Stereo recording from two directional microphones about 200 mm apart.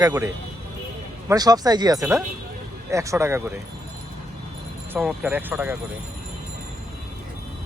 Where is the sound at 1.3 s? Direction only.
20° right (ahead or behind).